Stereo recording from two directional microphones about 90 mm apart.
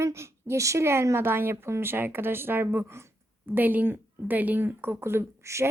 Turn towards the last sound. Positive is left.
turn(degrees=-30)  # may be behind; listen again after turning